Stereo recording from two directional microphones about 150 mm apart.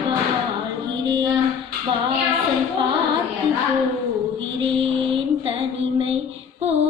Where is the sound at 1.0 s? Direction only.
30° right (ahead or behind).